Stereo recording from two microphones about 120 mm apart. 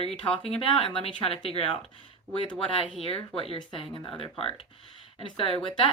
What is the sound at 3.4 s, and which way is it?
Speech, 45° left (ahead or behind).